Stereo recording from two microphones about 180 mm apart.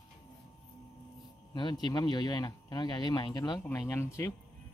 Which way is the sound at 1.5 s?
25° left (ahead or behind).